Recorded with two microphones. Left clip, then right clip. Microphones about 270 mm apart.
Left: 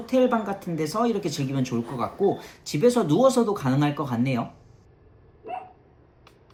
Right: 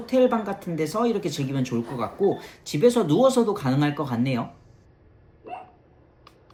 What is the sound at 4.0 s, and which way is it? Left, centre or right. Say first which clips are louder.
Speech: even; centre.